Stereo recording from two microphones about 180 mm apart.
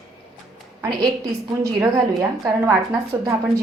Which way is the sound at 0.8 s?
25° right (ahead or behind).